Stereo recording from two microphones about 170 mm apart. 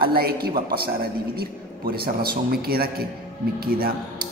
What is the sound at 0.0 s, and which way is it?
A man's voice, 60° right (ahead or behind).